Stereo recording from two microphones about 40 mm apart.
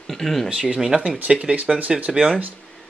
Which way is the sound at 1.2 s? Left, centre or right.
Right.